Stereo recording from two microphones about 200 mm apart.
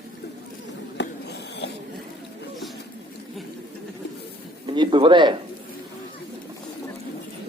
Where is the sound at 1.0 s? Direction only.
60° left (ahead or behind).